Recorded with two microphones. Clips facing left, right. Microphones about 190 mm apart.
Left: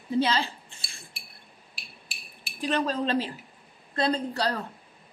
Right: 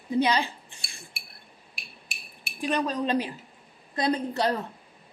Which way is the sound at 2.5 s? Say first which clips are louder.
Even; 15° right (ahead or behind).